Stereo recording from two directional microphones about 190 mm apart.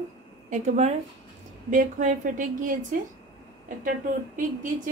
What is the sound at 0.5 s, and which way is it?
A woman's voice, 35° right (ahead or behind).